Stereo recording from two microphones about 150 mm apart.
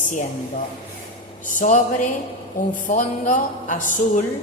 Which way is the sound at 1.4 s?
60° left (ahead or behind).